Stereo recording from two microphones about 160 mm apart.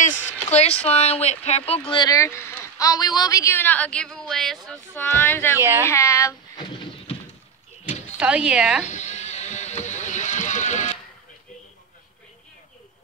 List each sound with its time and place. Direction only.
0.0 s a sound: 45° left (ahead or behind)
0.8 s speech: 40° left (ahead or behind); by 5.6 s 15° left (ahead or behind)
5.6 s speech: 15° right (ahead or behind)
5.9 s speech: 20° left (ahead or behind)
8.2 s speech: 5° right (ahead or behind)
8.8 s vehicle: 45° left (ahead or behind)